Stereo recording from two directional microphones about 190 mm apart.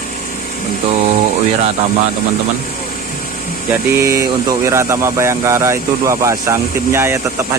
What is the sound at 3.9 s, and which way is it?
Speech, 15° right (ahead or behind).